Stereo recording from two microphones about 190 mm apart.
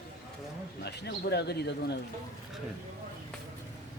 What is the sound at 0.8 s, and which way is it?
A man's voice, 60° left (ahead or behind).